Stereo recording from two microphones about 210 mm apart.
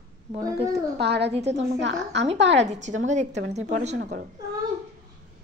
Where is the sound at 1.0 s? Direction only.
55° right (ahead or behind).